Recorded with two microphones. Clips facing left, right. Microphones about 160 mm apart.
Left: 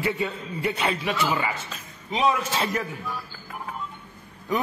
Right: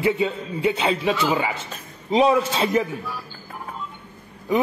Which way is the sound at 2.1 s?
30° right (ahead or behind).